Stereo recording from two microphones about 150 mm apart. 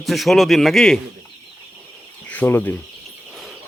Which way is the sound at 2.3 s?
10° left (ahead or behind).